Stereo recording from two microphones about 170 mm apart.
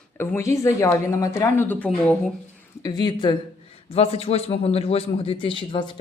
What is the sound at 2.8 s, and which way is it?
A man's voice, 25° left (ahead or behind).